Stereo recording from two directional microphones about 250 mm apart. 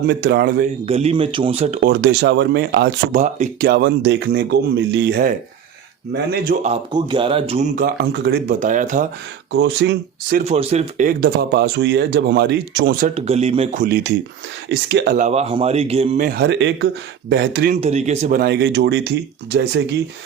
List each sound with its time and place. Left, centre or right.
0.1 s speech: right
0.9 s speech: right
1.9 s speech: right
6.3 s speech: right
6.9 s speech: centre
9.5 s speech: right
10.4 s speech: right
13.1 s speech: right
13.8 s speech: right
17.7 s speech: right